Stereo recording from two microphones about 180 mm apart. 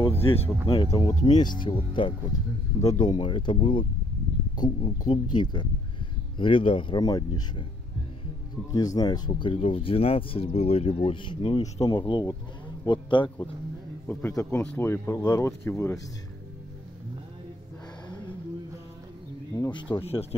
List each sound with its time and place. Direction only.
0.0 s speech: 30° left (ahead or behind)
8.7 s speech: 20° left (ahead or behind)
14.0 s speech: 15° left (ahead or behind)
19.5 s speech: 25° left (ahead or behind)